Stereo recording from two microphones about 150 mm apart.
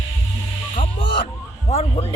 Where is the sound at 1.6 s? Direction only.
45° left (ahead or behind).